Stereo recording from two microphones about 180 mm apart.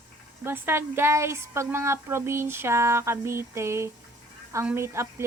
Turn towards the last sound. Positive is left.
turn(degrees=-15)  # may be behind; listen again after turning